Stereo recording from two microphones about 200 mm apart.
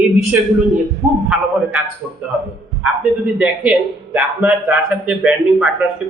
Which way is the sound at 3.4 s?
5° right (ahead or behind).